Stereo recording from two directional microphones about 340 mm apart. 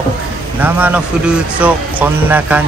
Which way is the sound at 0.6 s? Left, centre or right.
Centre.